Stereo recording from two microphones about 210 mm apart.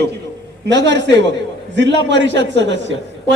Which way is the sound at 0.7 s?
55° right (ahead or behind).